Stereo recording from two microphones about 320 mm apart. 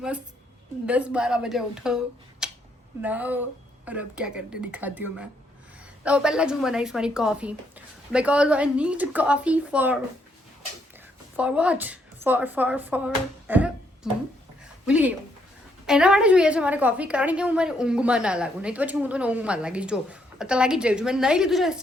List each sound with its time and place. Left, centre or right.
0.9 s a woman's voice: centre
11.3 s a woman's voice: centre